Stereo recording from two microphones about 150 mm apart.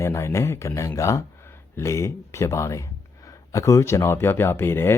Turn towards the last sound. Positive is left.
turn(degrees=15)  # may be behind; listen again after turning